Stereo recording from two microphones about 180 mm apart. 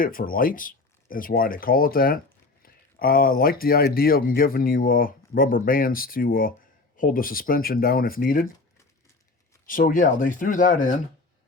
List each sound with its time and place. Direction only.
0.0 s speech: 50° left (ahead or behind)
9.6 s speech: 50° left (ahead or behind)